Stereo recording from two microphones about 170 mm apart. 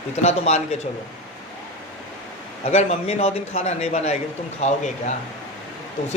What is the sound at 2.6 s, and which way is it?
A man's voice, 40° left (ahead or behind).